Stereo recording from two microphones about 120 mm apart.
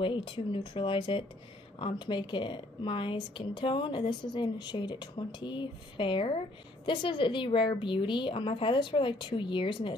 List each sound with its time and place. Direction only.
0.0 s speech: 45° left (ahead or behind)